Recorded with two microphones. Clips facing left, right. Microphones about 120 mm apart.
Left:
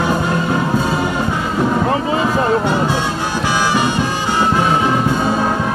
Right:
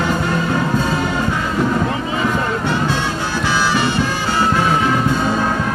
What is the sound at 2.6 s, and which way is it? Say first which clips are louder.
Music: left 2 dB; 15° left (ahead or behind).